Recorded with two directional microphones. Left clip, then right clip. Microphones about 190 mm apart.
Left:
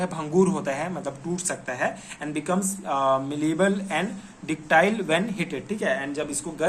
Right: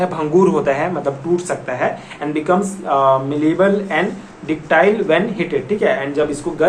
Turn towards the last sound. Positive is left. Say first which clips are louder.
# right 11 dB
turn(degrees=40)  # may be behind; listen again after turning